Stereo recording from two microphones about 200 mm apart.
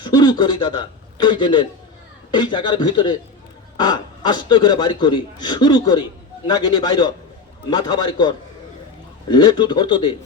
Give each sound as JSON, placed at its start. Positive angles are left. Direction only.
{"t": 0.0, "sound": "a man's voice", "side_deg": 20}
{"t": 9.3, "sound": "a man's voice", "side_deg": 20}